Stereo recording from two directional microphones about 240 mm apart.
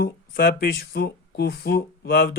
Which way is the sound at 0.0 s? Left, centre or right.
Left.